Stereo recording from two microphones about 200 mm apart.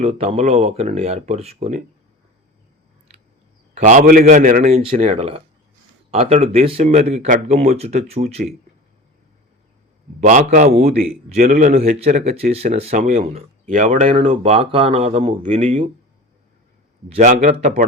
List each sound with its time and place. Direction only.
0.0 s speech: 30° right (ahead or behind)
3.8 s speech: 40° right (ahead or behind)
10.2 s speech: 35° right (ahead or behind)
11.4 s speech: 45° right (ahead or behind)
17.1 s speech: 35° right (ahead or behind)